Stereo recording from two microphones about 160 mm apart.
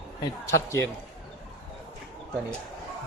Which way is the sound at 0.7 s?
15° left (ahead or behind).